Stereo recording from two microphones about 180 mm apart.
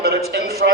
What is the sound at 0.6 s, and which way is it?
Speech, 50° right (ahead or behind).